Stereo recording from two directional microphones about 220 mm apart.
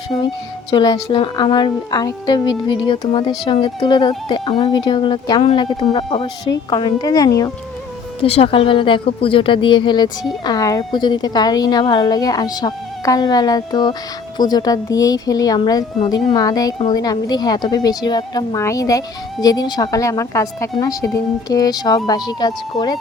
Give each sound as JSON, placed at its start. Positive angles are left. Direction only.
{"t": 0.1, "sound": "a woman's voice", "side_deg": 15}